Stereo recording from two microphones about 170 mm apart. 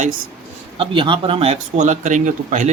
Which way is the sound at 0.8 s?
30° right (ahead or behind).